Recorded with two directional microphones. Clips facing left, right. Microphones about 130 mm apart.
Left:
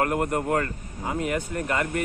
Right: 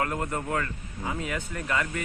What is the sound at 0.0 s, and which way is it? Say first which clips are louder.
Speech: left 5 dB; 55° left (ahead or behind).